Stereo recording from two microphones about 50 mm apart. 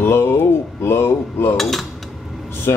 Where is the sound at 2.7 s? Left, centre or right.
Left.